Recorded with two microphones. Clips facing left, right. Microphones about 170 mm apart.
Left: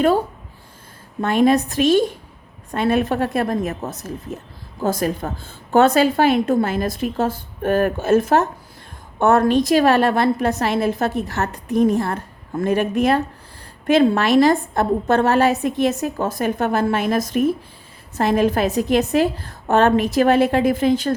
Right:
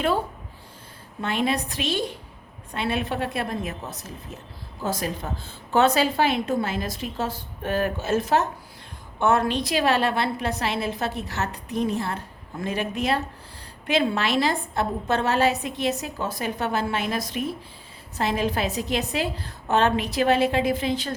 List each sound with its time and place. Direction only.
1.2 s a woman's voice: 45° left (ahead or behind)